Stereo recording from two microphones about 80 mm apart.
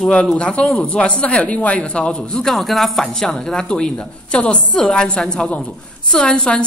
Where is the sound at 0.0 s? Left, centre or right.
Centre.